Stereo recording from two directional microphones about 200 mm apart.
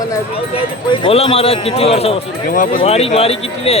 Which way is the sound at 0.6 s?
25° left (ahead or behind).